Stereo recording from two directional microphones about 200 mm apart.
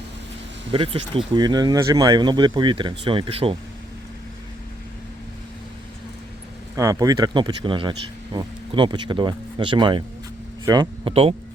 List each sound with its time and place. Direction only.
0.7 s speech: 25° right (ahead or behind)
6.7 s speech: 15° right (ahead or behind)